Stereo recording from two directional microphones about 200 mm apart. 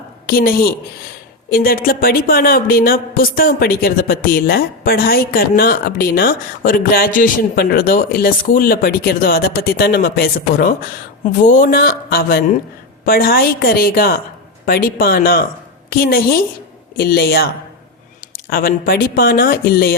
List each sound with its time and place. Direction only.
0.3 s speech: 50° left (ahead or behind)